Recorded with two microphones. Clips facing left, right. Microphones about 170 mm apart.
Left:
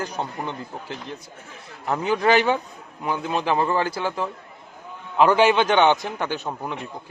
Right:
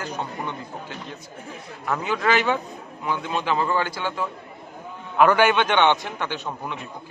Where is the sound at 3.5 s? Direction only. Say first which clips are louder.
Left 2 dB; 25° left (ahead or behind).